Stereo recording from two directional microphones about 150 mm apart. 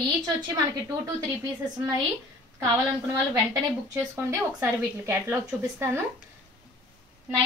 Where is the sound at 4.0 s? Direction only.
20° right (ahead or behind).